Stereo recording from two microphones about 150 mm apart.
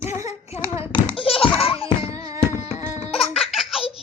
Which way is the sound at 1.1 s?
40° left (ahead or behind).